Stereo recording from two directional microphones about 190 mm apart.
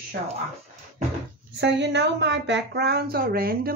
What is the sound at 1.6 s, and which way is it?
Speech, 65° right (ahead or behind).